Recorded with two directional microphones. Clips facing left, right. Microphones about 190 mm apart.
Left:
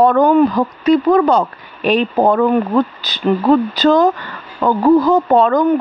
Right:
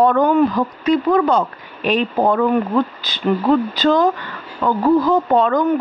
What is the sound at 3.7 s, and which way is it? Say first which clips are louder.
Speech: left 3 dB; 40° left (ahead or behind).